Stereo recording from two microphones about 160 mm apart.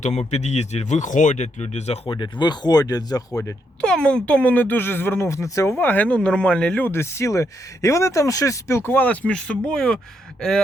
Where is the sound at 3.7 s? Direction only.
5° left (ahead or behind).